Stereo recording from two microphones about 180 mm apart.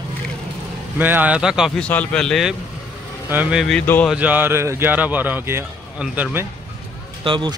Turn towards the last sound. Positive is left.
turn(degrees=-25)  # may be behind; listen again after turning